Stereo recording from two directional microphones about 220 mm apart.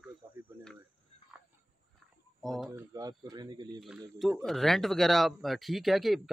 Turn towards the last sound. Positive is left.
turn(degrees=0)  # may be behind; listen again after turning